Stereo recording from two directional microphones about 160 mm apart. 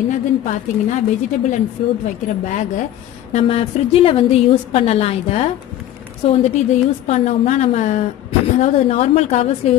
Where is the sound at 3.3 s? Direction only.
40° left (ahead or behind).